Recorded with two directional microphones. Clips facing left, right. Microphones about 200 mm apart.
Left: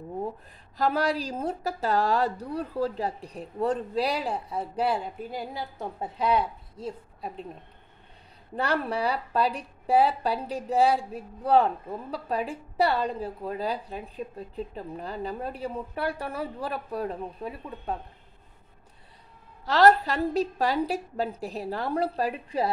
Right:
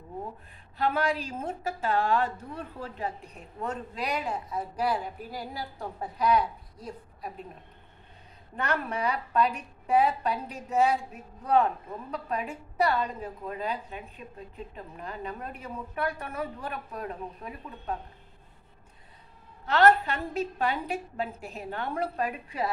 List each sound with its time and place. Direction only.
0.7 s a woman's voice: 40° left (ahead or behind)
8.5 s a woman's voice: 35° left (ahead or behind)
19.6 s a woman's voice: 35° left (ahead or behind)